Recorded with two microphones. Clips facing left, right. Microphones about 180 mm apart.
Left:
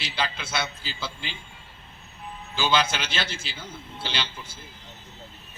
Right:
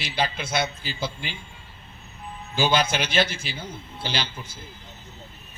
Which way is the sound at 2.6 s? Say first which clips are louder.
Right 2 dB; 50° right (ahead or behind).